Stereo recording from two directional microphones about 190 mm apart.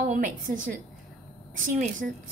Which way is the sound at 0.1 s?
45° right (ahead or behind).